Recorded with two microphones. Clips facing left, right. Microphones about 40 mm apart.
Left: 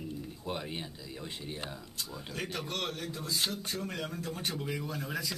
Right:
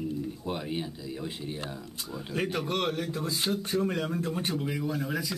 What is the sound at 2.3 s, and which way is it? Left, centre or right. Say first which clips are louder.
Speech: right 8 dB; centre.